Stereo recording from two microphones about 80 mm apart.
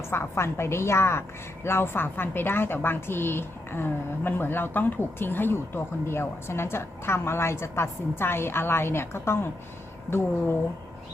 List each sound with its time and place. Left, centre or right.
0.1 s a woman's voice: left